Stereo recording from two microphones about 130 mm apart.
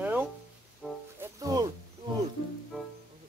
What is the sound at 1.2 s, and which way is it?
Music, 30° right (ahead or behind).